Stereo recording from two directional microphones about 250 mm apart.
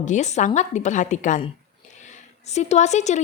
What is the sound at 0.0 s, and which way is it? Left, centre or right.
A woman's voice, left.